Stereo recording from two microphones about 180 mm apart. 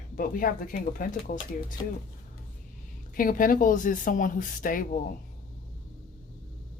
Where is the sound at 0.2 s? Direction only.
50° left (ahead or behind).